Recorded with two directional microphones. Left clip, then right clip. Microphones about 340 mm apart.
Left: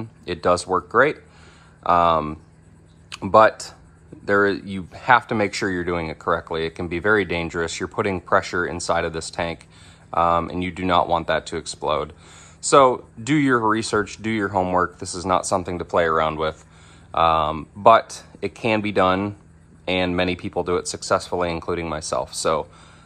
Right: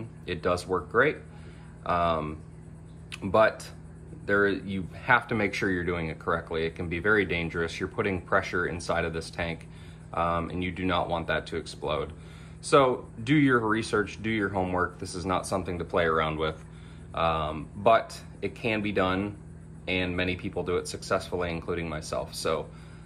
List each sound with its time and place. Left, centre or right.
0.3 s speech: centre